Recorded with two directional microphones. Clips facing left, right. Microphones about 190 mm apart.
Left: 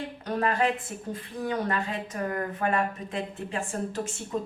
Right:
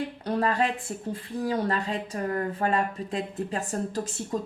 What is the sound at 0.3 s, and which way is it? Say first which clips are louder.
Speech: even; 30° right (ahead or behind).